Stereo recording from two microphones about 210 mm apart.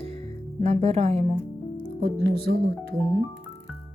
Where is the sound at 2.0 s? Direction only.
45° right (ahead or behind).